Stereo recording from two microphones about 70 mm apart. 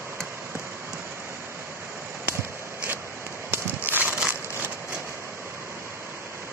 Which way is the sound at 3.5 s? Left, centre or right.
Right.